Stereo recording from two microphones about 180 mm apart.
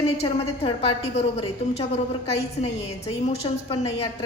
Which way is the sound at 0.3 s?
35° left (ahead or behind).